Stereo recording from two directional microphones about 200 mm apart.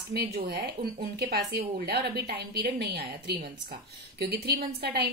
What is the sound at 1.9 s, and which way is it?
A woman's voice, 55° right (ahead or behind).